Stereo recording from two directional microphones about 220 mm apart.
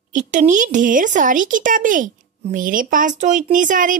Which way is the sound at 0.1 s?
35° right (ahead or behind).